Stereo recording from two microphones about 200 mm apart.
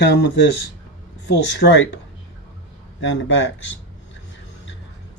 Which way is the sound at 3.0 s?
70° left (ahead or behind).